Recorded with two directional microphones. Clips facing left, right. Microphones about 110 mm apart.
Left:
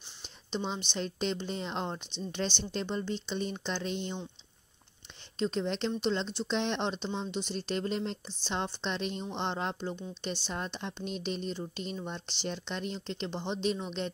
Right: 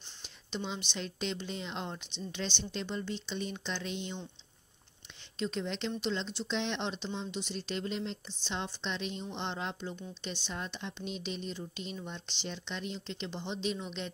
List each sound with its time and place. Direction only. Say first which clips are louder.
0.9 s speech: left 5 dB; 40° left (ahead or behind)
5.4 s speech: left 4 dB; 35° left (ahead or behind)